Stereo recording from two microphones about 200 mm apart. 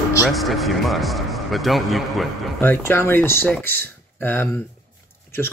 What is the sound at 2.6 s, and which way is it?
Speech, 10° left (ahead or behind).